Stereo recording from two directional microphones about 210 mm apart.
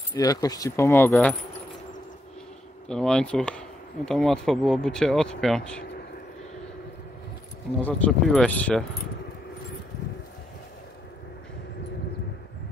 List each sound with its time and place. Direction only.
0.1 s speech: 15° left (ahead or behind)
2.9 s speech: 5° left (ahead or behind)
7.8 s speech: 5° left (ahead or behind)